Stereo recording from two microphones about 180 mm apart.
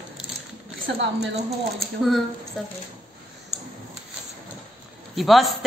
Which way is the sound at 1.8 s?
Centre (ahead or behind).